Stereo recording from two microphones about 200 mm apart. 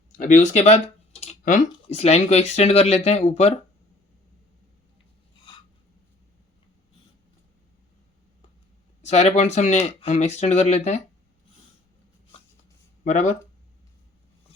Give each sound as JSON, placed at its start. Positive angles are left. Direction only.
{"t": 0.2, "sound": "speech", "side_deg": 40}
{"t": 9.0, "sound": "speech", "side_deg": 35}
{"t": 13.1, "sound": "speech", "side_deg": 40}